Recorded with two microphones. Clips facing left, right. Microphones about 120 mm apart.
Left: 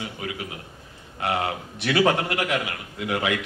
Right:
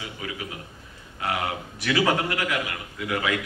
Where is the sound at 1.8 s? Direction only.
25° left (ahead or behind).